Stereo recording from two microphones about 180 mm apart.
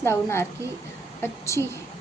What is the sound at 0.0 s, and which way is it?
A woman's voice, 15° left (ahead or behind).